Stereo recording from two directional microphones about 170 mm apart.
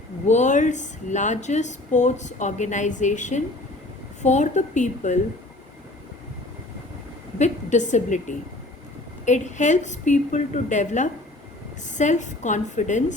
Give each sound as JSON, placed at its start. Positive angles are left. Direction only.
{"t": 0.3, "sound": "speech", "side_deg": 45}
{"t": 7.3, "sound": "speech", "side_deg": 45}